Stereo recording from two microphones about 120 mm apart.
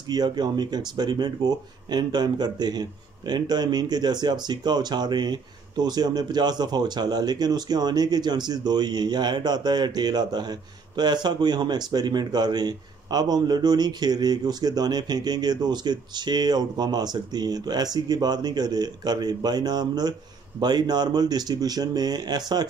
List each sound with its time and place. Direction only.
0.0 s speech: 35° right (ahead or behind)